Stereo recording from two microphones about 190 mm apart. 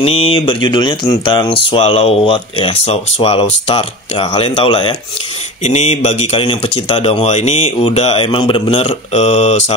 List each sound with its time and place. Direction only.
0.0 s speech: 30° left (ahead or behind)
5.6 s a man's voice: 35° left (ahead or behind)